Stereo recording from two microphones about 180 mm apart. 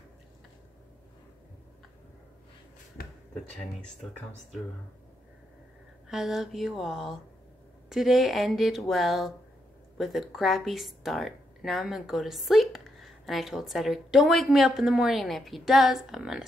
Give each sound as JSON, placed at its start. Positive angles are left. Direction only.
{"t": 6.0, "sound": "a woman's voice", "side_deg": 0}